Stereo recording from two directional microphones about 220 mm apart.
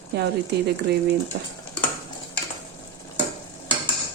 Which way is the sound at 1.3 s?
50° right (ahead or behind).